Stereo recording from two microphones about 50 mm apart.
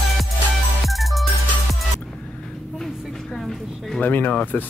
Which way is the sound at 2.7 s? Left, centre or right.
Centre.